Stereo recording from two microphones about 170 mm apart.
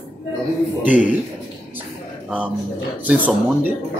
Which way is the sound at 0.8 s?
50° left (ahead or behind).